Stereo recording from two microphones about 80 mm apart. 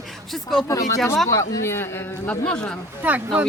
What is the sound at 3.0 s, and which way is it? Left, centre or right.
Speech, centre.